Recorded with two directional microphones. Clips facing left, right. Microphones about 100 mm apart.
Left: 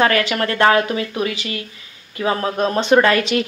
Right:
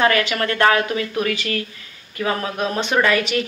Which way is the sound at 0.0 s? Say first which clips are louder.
Left 1 dB; 30° left (ahead or behind).